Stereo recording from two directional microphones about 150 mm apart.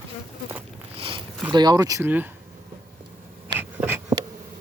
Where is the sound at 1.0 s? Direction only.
35° right (ahead or behind).